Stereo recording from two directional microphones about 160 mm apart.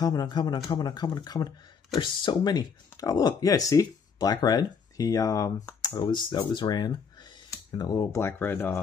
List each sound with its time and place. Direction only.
0.0 s speech: 25° left (ahead or behind)